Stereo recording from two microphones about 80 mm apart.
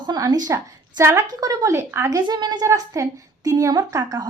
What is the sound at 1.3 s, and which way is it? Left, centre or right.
Speech, right.